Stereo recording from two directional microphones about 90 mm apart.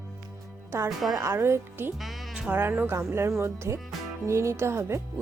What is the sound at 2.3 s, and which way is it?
Music, 10° right (ahead or behind).